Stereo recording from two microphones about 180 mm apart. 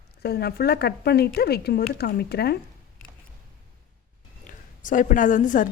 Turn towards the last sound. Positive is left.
turn(degrees=45)  # may be behind; listen again after turning